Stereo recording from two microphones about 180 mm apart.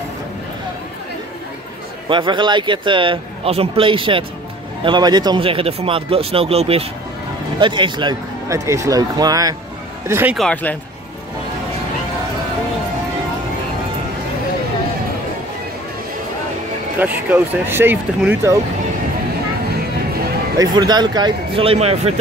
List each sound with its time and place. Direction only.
2.0 s a man's voice: 25° right (ahead or behind)
10.3 s speech: 5° left (ahead or behind)
17.0 s speech: 10° right (ahead or behind)
20.5 s a man's voice: 20° right (ahead or behind); by 22.2 s 35° right (ahead or behind)